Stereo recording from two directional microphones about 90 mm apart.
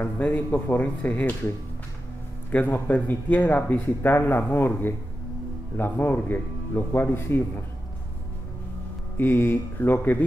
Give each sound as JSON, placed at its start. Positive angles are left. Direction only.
{"t": 0.0, "sound": "speech", "side_deg": 20}
{"t": 2.5, "sound": "speech", "side_deg": 20}
{"t": 9.1, "sound": "speech", "side_deg": 25}